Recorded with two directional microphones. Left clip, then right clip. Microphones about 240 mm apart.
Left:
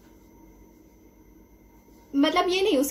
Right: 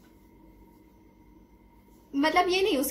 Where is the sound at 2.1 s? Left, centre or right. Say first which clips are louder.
Left 1 dB; centre.